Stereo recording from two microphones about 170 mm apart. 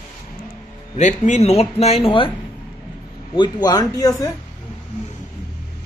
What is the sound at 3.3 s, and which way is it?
Speech, 25° left (ahead or behind).